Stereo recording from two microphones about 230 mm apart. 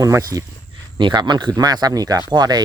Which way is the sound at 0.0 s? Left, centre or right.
Centre.